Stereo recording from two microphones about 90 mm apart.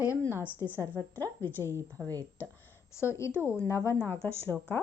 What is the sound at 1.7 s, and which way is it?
Speech, 30° right (ahead or behind).